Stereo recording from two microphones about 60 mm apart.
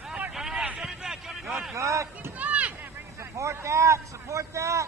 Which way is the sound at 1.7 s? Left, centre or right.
Right.